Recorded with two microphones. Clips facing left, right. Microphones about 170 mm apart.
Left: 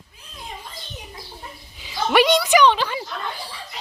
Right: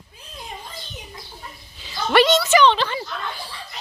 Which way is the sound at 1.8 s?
10° left (ahead or behind).